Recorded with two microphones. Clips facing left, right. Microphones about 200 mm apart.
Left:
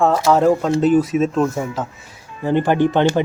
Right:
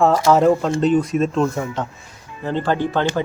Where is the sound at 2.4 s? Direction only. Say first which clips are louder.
Left 5 dB; 15° left (ahead or behind).